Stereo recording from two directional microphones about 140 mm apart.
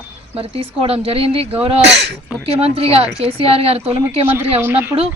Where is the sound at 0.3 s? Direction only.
40° right (ahead or behind).